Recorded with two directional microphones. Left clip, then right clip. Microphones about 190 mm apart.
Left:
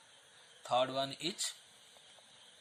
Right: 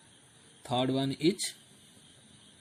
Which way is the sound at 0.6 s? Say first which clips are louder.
Right 2 dB; 10° right (ahead or behind).